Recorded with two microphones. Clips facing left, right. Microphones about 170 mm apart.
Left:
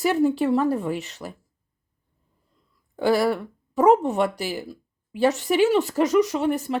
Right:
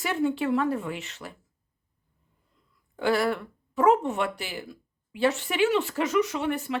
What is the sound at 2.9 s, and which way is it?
Speech, 40° left (ahead or behind).